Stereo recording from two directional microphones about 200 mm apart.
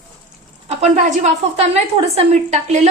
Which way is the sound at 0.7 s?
35° right (ahead or behind).